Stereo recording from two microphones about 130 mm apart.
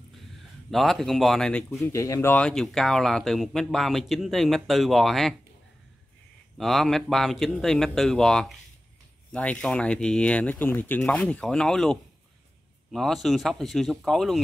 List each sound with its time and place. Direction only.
0.7 s speech: centre (ahead or behind)
1.9 s speech: 20° left (ahead or behind)
2.4 s speech: 5° left (ahead or behind)
6.6 s speech: centre (ahead or behind)